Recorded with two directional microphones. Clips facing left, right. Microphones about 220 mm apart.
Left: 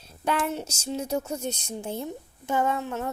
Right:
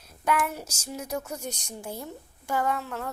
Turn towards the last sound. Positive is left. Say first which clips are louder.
# left 2 dB
turn(degrees=20)  # may be behind; listen again after turning